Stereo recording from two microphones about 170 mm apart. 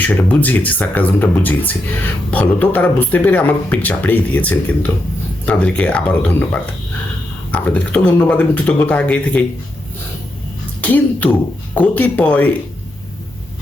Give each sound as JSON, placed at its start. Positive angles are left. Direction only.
{"t": 0.0, "sound": "speech", "side_deg": 10}
{"t": 10.8, "sound": "speech", "side_deg": 10}